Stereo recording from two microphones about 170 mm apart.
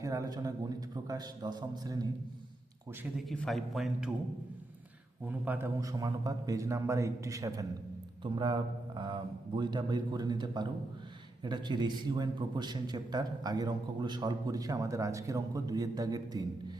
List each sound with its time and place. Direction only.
0.0 s a man's voice: 20° right (ahead or behind)
3.0 s a man's voice: centre (ahead or behind)
5.2 s a man's voice: 10° right (ahead or behind)